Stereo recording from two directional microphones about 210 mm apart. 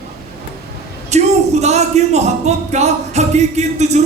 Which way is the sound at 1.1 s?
30° right (ahead or behind).